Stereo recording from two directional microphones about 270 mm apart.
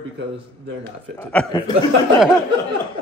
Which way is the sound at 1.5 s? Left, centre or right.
Centre.